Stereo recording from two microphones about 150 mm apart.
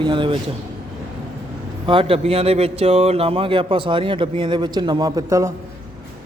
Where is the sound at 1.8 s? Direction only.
35° right (ahead or behind); by 5.5 s 20° right (ahead or behind).